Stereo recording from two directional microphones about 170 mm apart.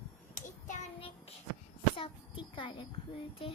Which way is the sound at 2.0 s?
30° left (ahead or behind).